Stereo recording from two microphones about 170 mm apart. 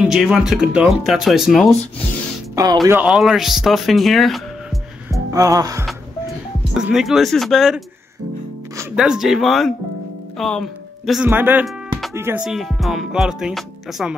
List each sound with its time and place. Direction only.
0.0 s speech: 5° right (ahead or behind)
2.5 s speech: 25° right (ahead or behind)
2.9 s speech: 5° right (ahead or behind)
5.3 s music: 20° right (ahead or behind)
6.7 s speech: 5° right (ahead or behind)
8.9 s speech: 5° right (ahead or behind)
11.2 s speech: 10° right (ahead or behind)
12.4 s speech: centre (ahead or behind)